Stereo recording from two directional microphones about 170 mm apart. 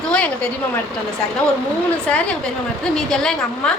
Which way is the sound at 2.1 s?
5° left (ahead or behind).